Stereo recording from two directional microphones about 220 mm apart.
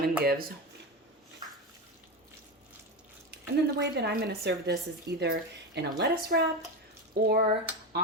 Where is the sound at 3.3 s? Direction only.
50° right (ahead or behind).